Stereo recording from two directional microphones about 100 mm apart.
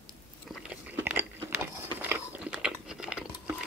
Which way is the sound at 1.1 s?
20° right (ahead or behind).